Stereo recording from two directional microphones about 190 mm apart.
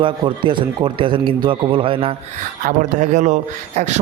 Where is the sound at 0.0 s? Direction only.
25° right (ahead or behind).